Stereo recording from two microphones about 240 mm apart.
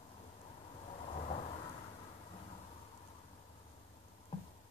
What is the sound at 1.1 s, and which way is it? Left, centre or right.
Thunder, left.